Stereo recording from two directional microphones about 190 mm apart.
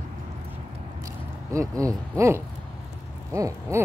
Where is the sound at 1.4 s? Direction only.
15° right (ahead or behind).